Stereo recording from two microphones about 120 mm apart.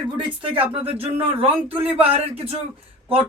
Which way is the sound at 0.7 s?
55° right (ahead or behind).